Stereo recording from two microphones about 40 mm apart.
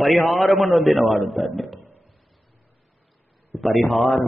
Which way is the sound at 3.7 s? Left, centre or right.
Centre.